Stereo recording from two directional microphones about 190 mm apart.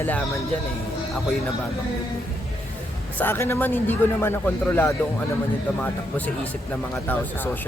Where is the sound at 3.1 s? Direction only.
10° left (ahead or behind).